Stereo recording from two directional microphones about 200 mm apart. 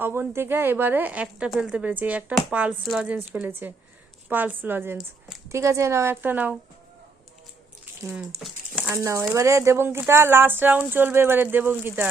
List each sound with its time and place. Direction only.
0.0 s speech: 10° right (ahead or behind)
8.0 s speech: 5° right (ahead or behind)